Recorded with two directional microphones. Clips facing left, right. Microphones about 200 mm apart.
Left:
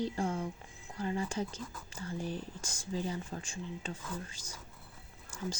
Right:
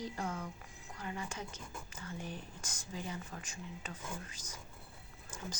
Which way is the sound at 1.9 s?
30° left (ahead or behind).